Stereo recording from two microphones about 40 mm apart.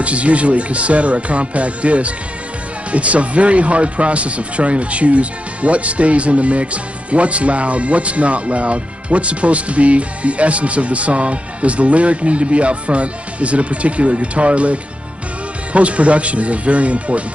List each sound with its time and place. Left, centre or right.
0.0 s speech: right